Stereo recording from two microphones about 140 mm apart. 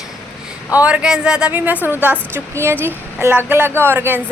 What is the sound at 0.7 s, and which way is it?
Speech, 10° right (ahead or behind).